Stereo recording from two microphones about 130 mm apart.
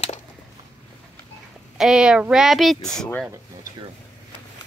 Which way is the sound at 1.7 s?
5° right (ahead or behind).